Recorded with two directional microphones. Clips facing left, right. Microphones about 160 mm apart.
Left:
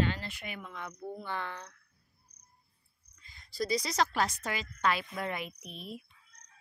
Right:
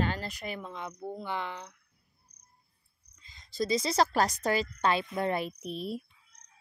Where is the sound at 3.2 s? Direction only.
20° right (ahead or behind).